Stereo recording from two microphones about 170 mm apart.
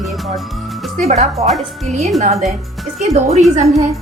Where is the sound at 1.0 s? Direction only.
40° right (ahead or behind).